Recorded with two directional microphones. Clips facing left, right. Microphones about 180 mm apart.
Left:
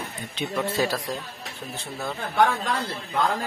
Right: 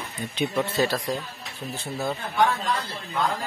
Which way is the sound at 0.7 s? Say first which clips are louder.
Right 1 dB; 10° left (ahead or behind).